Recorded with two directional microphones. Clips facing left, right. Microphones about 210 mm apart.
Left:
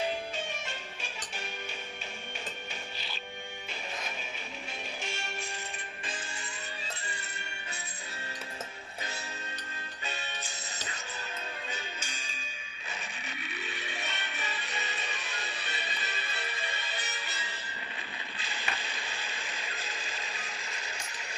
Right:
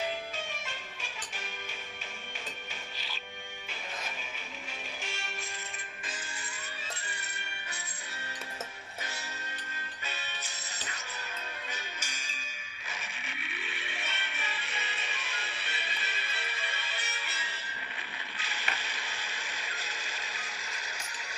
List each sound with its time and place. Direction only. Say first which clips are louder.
12.9 s music: left 2 dB; 35° left (ahead or behind)
18.3 s ratchet: left 1 dB; 30° left (ahead or behind)